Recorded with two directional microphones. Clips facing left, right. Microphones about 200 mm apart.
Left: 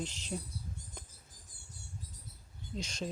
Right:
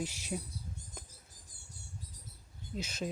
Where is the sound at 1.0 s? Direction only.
5° right (ahead or behind).